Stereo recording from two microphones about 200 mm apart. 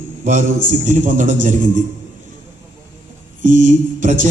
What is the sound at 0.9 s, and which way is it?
Speech, 40° right (ahead or behind).